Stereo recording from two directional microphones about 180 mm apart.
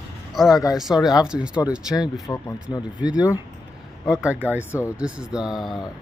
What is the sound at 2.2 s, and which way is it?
Speech, 20° left (ahead or behind).